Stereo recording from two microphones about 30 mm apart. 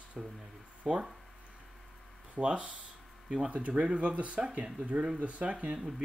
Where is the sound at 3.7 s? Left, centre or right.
Right.